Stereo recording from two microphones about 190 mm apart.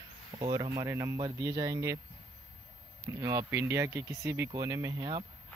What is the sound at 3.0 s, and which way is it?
Speech, 15° right (ahead or behind).